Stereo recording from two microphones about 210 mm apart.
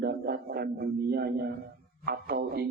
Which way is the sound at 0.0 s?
45° right (ahead or behind).